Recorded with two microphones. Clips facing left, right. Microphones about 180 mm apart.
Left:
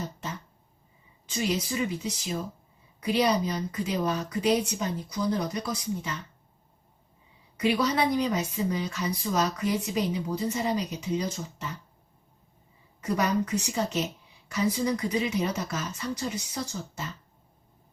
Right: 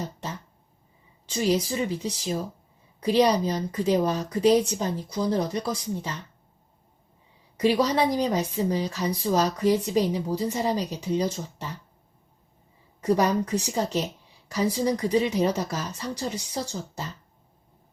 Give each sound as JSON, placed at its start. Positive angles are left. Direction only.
{"t": 1.4, "sound": "a woman's voice", "side_deg": -30}
{"t": 7.5, "sound": "a woman's voice", "side_deg": -30}
{"t": 13.0, "sound": "a woman's voice", "side_deg": -35}